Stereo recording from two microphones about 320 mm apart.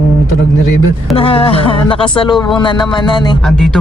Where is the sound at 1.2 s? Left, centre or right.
Centre.